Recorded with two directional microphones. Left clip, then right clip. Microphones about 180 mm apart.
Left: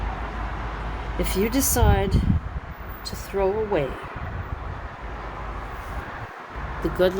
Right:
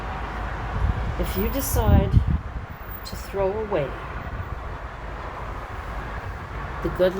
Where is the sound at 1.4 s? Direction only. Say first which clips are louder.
Left 4 dB; 45° left (ahead or behind).